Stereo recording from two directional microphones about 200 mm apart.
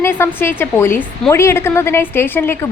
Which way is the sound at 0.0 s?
10° left (ahead or behind).